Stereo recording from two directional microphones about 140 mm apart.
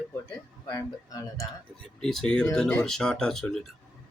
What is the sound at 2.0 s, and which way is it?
Speech, 5° left (ahead or behind).